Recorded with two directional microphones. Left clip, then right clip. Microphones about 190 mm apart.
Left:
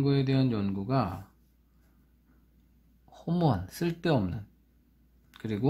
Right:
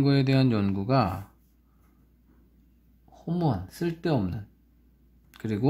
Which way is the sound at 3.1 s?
10° left (ahead or behind).